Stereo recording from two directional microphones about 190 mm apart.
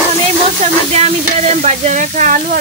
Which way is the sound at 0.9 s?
35° right (ahead or behind).